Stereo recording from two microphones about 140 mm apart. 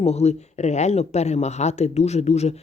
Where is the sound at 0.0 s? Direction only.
50° left (ahead or behind).